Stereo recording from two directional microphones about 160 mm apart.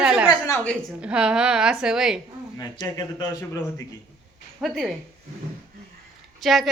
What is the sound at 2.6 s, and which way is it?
Speech, 20° left (ahead or behind).